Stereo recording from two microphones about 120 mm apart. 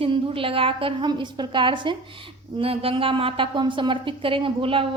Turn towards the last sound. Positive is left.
turn(degrees=-50)  # may be behind; listen again after turning